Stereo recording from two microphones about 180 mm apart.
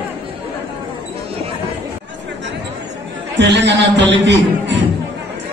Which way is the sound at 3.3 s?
75° right (ahead or behind).